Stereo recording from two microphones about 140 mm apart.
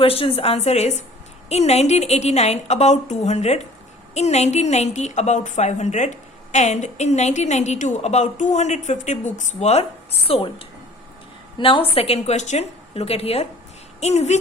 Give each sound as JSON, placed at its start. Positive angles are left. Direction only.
{"t": 0.0, "sound": "a woman's voice", "side_deg": 40}